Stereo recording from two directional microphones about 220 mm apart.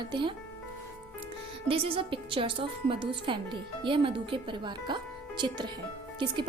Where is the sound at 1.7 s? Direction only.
25° right (ahead or behind).